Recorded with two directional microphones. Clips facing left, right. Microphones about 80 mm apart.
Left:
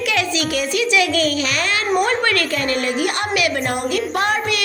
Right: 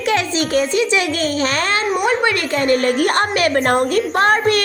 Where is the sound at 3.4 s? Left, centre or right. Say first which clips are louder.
Right 6 dB; right.